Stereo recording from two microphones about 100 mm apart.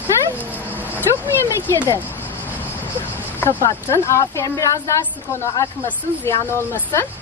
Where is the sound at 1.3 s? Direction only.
25° left (ahead or behind).